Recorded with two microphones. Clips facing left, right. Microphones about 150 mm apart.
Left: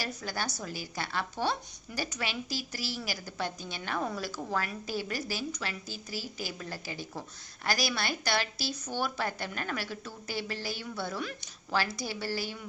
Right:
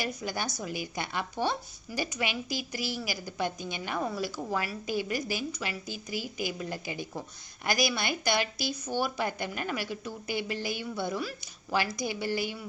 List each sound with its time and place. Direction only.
0.0 s a woman's voice: 15° right (ahead or behind)